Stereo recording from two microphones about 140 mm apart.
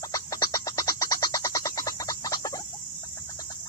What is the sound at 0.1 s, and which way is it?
Frog, 25° left (ahead or behind).